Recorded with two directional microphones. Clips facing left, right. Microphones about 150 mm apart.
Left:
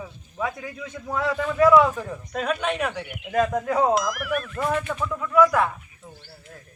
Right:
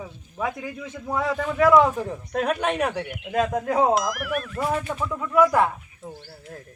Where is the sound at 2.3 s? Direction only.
50° right (ahead or behind).